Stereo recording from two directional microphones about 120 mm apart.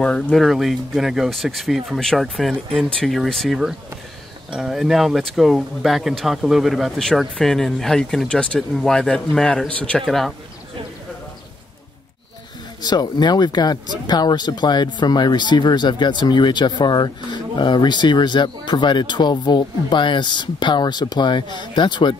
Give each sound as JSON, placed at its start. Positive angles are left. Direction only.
{"t": 0.0, "sound": "speech", "side_deg": 10}
{"t": 12.8, "sound": "speech", "side_deg": 35}